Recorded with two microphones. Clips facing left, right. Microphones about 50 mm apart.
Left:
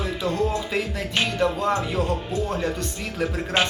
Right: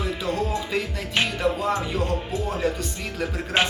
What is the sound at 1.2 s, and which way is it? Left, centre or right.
Music, centre.